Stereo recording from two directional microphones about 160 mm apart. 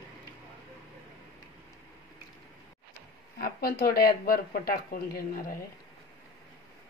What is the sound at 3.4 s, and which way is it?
Speech, 70° left (ahead or behind).